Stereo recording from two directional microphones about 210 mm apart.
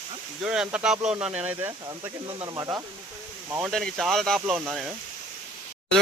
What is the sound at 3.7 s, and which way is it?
Speech, centre (ahead or behind).